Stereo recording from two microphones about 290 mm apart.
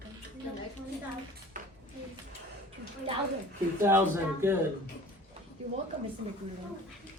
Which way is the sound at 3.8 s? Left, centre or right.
Centre.